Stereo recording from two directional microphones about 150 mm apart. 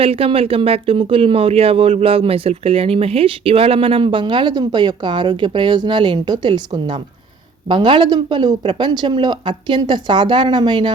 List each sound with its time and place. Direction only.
0.0 s speech: 40° right (ahead or behind)